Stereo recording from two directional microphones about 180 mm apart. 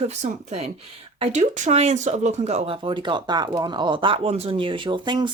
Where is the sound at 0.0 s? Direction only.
35° right (ahead or behind).